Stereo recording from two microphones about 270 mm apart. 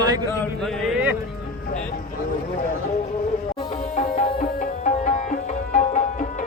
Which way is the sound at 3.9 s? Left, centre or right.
Left.